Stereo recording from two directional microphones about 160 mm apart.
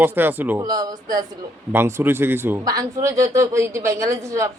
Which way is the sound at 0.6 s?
25° right (ahead or behind).